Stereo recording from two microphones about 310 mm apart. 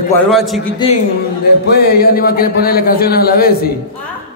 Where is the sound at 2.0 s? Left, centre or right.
Left.